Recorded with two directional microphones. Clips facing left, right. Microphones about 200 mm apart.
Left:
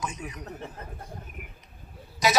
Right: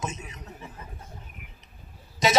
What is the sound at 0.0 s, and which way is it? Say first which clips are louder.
Speech: even; 25° right (ahead or behind).